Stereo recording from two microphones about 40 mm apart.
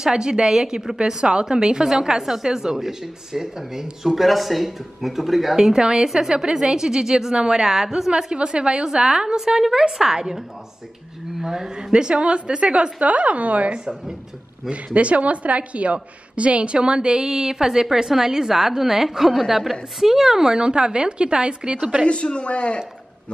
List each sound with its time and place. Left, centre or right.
0.0 s a woman's voice: centre
5.7 s a woman's voice: centre
8.4 s a woman's voice: right
11.4 s a woman's voice: centre; by 13.7 s right
15.0 s a woman's voice: right
22.0 s speech: left